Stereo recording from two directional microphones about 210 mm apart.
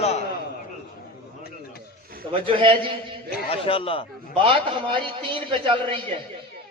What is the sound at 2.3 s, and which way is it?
Speech, 25° right (ahead or behind).